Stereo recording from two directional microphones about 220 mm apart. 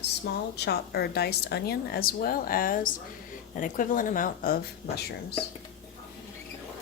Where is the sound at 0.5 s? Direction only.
50° left (ahead or behind).